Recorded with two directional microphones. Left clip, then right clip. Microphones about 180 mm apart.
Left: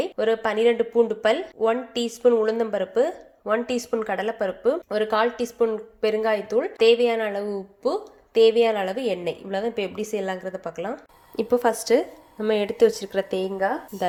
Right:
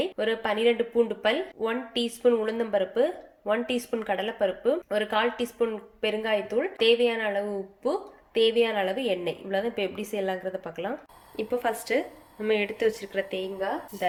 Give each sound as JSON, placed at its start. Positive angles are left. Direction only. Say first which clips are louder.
{"t": 0.0, "sound": "speech", "louder": "left 5 dB", "side_deg": 20}
{"t": 11.3, "sound": "speech", "louder": "left 7 dB", "side_deg": 50}